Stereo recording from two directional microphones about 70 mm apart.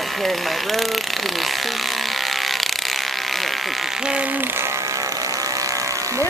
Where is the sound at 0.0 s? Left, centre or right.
Centre.